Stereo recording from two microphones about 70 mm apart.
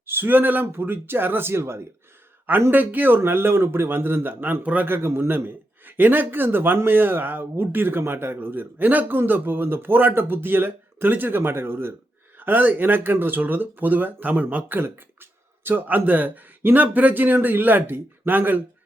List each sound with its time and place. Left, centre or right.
0.0 s a man's voice: right
4.9 s a man's voice: right